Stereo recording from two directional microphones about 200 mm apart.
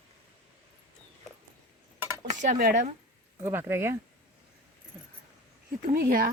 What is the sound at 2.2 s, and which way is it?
Speech, 40° right (ahead or behind).